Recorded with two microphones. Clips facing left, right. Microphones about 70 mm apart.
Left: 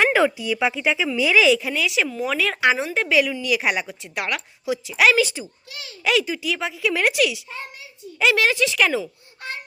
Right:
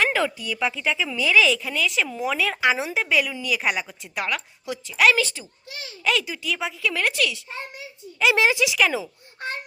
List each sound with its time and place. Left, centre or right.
0.0 s a sound: centre
0.3 s speech: centre
2.0 s a woman's voice: centre
6.8 s speech: centre
8.3 s speech: centre